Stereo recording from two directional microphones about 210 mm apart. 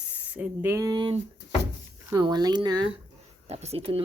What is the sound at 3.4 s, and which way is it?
Speech, 30° right (ahead or behind).